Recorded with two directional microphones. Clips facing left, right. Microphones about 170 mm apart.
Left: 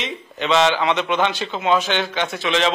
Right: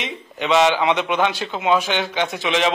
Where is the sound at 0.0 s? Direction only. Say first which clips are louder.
Even; 10° right (ahead or behind).